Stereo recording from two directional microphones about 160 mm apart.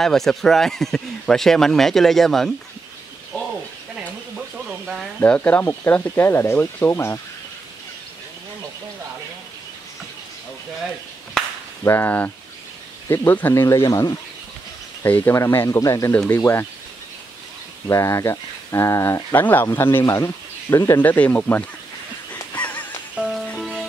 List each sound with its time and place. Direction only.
0.0 s speech: 5° left (ahead or behind)
5.2 s speech: 10° left (ahead or behind)
11.8 s speech: 15° left (ahead or behind)
17.8 s speech: 20° left (ahead or behind)
22.5 s honk: 10° left (ahead or behind)
23.1 s music: 5° right (ahead or behind)